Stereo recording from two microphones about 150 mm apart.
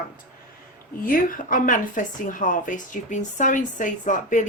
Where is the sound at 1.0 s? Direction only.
65° left (ahead or behind).